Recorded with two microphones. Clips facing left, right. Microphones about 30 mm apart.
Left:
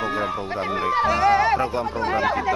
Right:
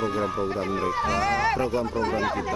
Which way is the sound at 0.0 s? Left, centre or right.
Left.